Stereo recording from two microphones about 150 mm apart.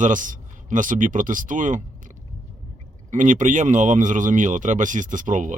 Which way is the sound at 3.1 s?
55° right (ahead or behind).